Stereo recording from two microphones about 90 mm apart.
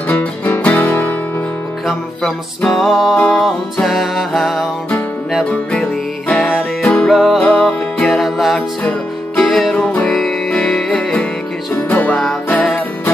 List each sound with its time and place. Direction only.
0.1 s music: 15° left (ahead or behind)
1.9 s music: 5° left (ahead or behind)
5.5 s music: 10° left (ahead or behind)
11.9 s music: 20° left (ahead or behind)